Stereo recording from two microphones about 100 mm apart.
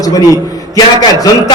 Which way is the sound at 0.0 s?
35° left (ahead or behind).